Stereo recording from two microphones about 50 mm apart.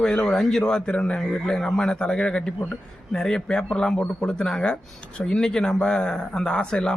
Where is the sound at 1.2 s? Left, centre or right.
Centre.